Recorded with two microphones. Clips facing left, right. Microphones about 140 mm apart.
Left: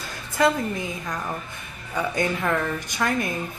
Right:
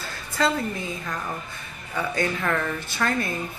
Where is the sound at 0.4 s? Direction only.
15° left (ahead or behind).